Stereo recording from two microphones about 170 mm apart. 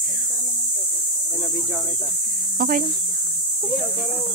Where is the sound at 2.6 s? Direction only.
55° right (ahead or behind).